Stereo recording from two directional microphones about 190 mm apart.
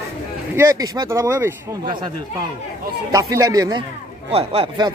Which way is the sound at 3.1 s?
20° right (ahead or behind).